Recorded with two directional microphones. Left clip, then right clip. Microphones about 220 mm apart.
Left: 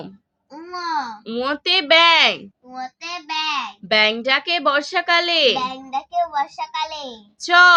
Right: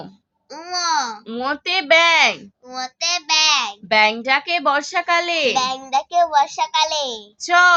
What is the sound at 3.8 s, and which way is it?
A woman's voice, 15° left (ahead or behind).